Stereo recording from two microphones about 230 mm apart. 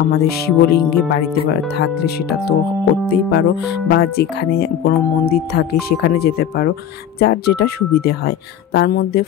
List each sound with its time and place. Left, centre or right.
0.0 s speech: left